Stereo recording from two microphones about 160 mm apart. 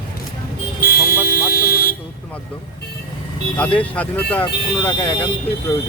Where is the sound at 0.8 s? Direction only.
70° left (ahead or behind).